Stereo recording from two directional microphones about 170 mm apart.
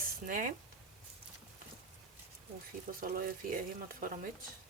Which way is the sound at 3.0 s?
55° right (ahead or behind).